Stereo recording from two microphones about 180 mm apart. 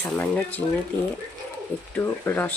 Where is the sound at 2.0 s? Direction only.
10° left (ahead or behind).